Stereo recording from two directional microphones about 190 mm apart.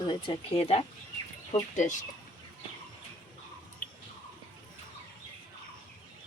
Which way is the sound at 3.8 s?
45° left (ahead or behind).